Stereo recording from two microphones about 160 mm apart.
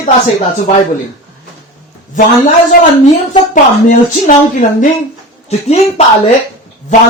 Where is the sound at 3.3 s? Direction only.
50° left (ahead or behind).